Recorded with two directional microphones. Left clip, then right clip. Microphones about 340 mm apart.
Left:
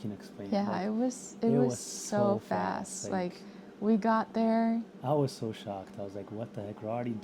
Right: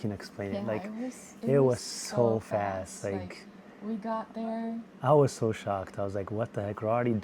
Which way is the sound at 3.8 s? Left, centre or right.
Left.